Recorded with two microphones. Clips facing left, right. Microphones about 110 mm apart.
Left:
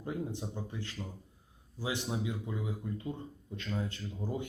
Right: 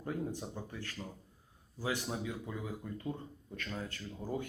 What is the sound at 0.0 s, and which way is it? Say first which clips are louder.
Speech: left 1 dB; 20° left (ahead or behind).